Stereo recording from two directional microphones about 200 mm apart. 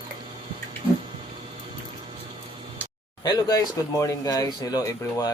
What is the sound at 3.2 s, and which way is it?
Speech, 20° left (ahead or behind).